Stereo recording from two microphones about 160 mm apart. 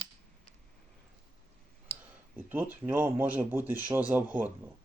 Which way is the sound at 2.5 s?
10° right (ahead or behind).